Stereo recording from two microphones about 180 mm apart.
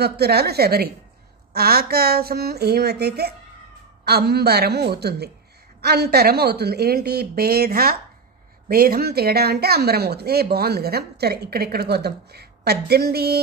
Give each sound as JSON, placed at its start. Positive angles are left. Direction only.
{"t": 0.0, "sound": "speech", "side_deg": -65}